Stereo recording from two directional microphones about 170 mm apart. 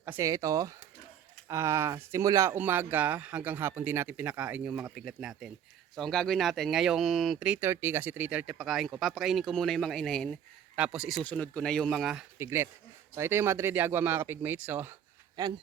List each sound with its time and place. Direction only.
0.0 s speech: 15° right (ahead or behind)
11.2 s speech: 5° left (ahead or behind)
12.4 s speech: 15° right (ahead or behind)